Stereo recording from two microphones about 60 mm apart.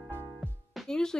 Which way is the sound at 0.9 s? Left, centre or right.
Centre.